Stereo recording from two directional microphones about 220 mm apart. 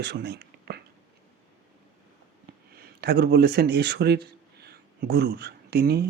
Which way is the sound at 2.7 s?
45° right (ahead or behind).